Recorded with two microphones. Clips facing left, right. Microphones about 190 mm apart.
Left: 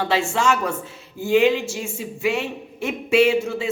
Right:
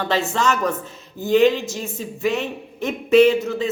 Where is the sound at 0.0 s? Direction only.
10° left (ahead or behind).